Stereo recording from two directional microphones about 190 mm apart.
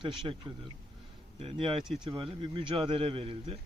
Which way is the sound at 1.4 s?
30° right (ahead or behind).